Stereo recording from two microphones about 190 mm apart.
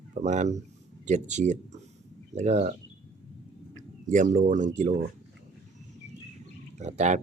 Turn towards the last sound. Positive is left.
turn(degrees=-40)  # may be behind; listen again after turning